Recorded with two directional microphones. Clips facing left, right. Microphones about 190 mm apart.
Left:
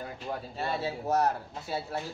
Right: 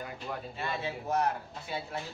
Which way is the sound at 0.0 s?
35° left (ahead or behind).